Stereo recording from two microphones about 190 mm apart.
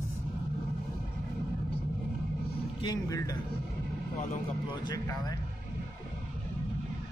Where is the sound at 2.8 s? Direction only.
20° left (ahead or behind).